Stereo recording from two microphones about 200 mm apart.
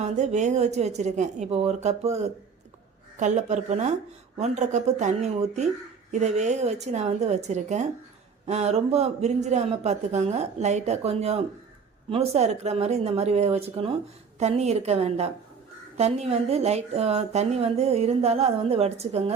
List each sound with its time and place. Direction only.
0.0 s speech: 35° right (ahead or behind)